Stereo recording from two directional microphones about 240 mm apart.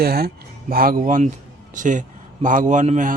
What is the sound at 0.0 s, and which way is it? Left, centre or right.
A man's voice, right.